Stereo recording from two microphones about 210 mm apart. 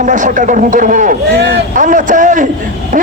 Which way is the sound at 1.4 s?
50° right (ahead or behind).